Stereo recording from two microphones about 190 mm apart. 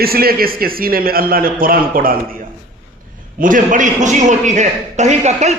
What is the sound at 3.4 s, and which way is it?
A man's voice, 45° right (ahead or behind).